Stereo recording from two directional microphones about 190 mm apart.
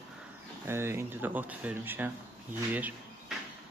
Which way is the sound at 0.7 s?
15° right (ahead or behind).